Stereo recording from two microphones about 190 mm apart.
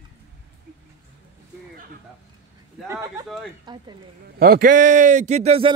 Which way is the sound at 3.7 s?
25° right (ahead or behind).